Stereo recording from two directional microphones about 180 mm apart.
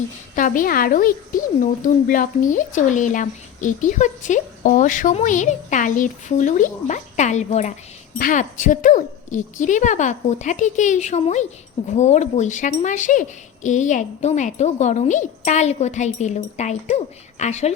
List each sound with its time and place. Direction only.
0.3 s speech: 50° left (ahead or behind)